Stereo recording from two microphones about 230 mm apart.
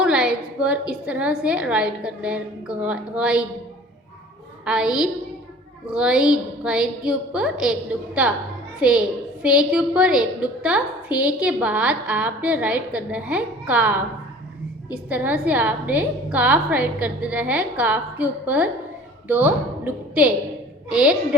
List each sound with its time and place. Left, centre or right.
0.0 s a woman's voice: centre
4.6 s a woman's voice: centre